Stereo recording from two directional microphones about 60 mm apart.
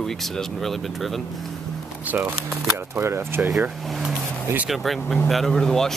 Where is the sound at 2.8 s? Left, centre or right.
Right.